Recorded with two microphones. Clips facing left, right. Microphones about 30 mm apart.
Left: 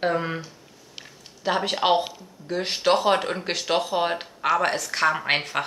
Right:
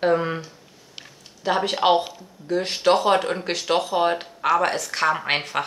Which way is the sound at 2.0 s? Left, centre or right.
Centre.